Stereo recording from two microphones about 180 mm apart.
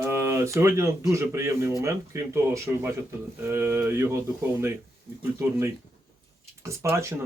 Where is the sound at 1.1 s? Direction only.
15° right (ahead or behind).